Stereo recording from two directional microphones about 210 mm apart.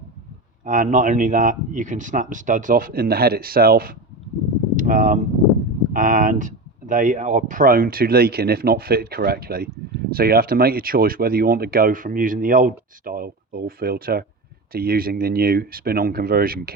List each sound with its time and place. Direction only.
0.6 s speech: 35° right (ahead or behind)